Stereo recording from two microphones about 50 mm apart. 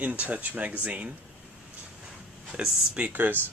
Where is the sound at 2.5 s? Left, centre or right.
Centre.